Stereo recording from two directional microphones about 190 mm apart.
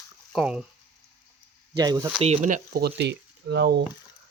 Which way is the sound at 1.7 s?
20° right (ahead or behind).